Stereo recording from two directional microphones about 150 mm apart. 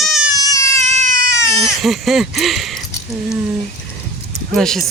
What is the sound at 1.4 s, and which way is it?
Baby cry, 20° left (ahead or behind).